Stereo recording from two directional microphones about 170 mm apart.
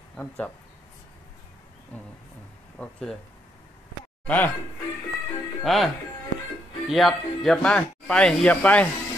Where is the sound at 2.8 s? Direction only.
10° left (ahead or behind).